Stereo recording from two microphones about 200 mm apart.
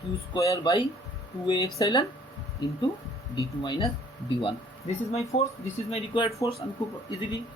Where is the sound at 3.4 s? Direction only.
20° left (ahead or behind).